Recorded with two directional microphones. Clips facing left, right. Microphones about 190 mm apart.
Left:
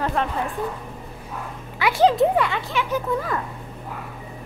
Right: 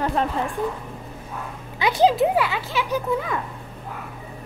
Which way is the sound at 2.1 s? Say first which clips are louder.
Left 1 dB; 5° right (ahead or behind).